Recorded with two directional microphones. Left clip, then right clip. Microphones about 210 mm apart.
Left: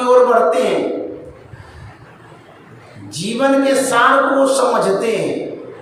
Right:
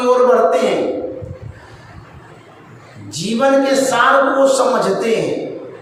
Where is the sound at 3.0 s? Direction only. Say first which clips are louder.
Right 1 dB; 5° left (ahead or behind).